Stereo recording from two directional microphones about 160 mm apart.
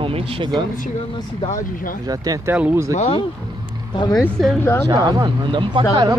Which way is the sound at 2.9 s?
45° left (ahead or behind).